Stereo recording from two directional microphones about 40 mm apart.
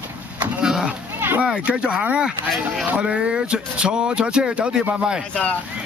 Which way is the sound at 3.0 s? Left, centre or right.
Right.